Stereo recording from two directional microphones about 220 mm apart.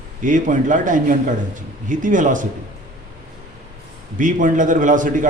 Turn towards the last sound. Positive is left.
turn(degrees=-35)  # may be behind; listen again after turning